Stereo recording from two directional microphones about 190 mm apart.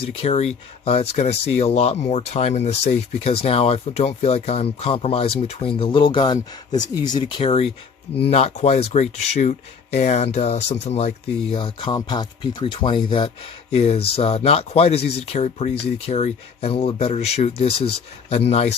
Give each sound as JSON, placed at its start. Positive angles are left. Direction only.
{"t": 0.2, "sound": "speech", "side_deg": 35}